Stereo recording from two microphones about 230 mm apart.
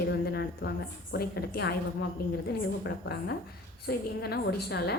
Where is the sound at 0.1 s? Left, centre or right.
Left.